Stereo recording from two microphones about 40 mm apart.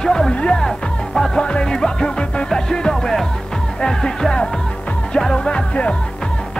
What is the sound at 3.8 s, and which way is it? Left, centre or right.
Speech, centre.